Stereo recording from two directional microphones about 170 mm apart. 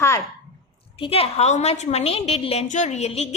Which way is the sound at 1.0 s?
35° left (ahead or behind).